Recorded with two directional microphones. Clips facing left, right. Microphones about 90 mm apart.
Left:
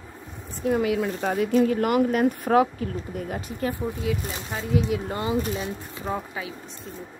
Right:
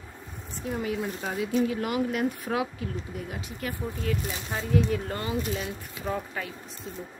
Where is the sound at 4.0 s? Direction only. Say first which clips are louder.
Left 3 dB; 5° left (ahead or behind).